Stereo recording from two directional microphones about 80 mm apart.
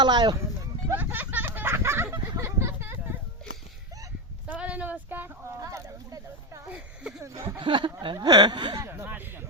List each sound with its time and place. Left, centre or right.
0.0 s speech: right
0.9 s a sound: right
4.4 s speech: centre
5.5 s speech: right
6.7 s a sound: centre
7.2 s speech: right
7.6 s speech: right
8.0 s speech: right
8.9 s speech: right